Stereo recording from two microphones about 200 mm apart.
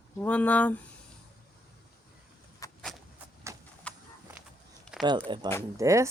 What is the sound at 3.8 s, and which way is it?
Horse, 5° left (ahead or behind).